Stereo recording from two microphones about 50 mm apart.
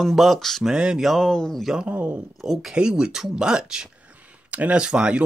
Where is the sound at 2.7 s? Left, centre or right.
Centre.